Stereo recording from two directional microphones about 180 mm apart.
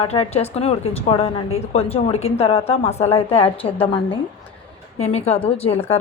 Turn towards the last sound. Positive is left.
turn(degrees=35)  # may be behind; listen again after turning